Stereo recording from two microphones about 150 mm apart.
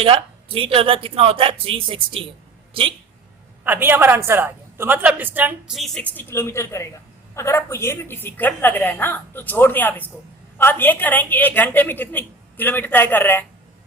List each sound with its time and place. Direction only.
0.0 s speech: 40° right (ahead or behind)
3.6 s a woman's voice: 15° right (ahead or behind)
5.7 s a woman's voice: centre (ahead or behind)